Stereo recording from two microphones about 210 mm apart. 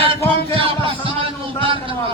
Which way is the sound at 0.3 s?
25° right (ahead or behind).